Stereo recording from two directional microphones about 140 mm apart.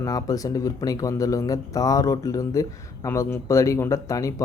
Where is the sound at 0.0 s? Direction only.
25° left (ahead or behind).